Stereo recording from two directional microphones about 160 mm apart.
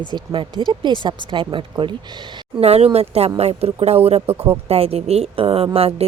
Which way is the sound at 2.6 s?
40° right (ahead or behind).